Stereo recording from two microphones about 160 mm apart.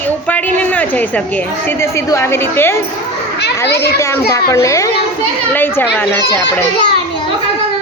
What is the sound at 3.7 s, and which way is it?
Speech, 90° left.